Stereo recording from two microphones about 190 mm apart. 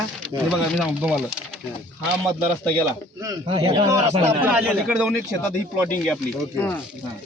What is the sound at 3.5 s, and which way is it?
Speech, 30° right (ahead or behind).